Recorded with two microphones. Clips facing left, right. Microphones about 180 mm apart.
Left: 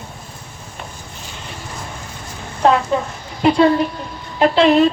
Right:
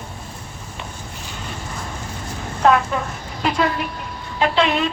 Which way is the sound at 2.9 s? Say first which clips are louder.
Left 5 dB; 25° left (ahead or behind).